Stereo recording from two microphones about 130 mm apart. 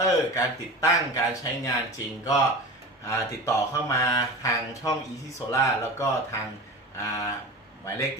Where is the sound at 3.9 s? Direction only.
25° left (ahead or behind).